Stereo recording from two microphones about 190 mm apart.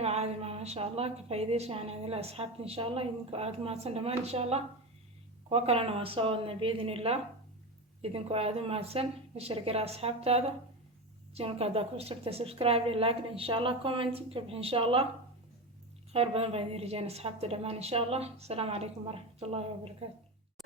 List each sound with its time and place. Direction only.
0.0 s a woman's voice: 35° right (ahead or behind)
16.1 s a woman's voice: 30° right (ahead or behind)